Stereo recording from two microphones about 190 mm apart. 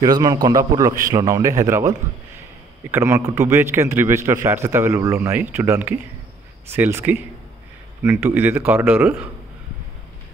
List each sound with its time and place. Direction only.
0.0 s a man's voice: 20° right (ahead or behind)